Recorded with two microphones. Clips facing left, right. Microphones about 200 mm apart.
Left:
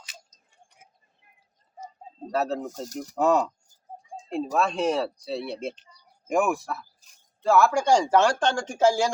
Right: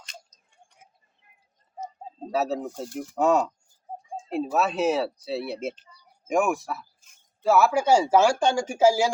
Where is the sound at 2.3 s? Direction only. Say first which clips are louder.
Right 1 dB; 5° right (ahead or behind).